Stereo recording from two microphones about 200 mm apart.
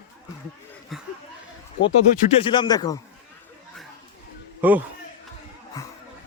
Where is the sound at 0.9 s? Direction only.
Centre (ahead or behind).